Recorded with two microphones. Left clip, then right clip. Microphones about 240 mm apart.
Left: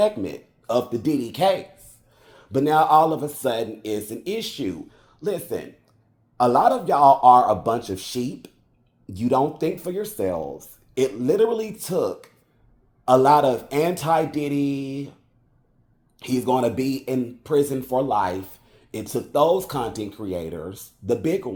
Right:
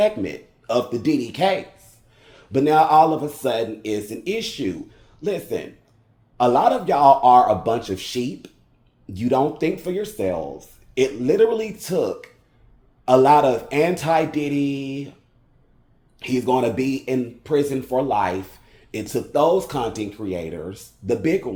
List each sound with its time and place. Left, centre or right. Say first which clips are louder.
0.0 s speech: right 1 dB; centre
16.1 s speech: right 2 dB; left